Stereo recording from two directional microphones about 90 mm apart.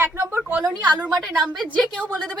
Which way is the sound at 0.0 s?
25° right (ahead or behind).